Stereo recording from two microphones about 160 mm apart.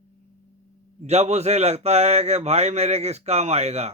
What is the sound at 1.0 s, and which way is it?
A man's voice, 45° right (ahead or behind).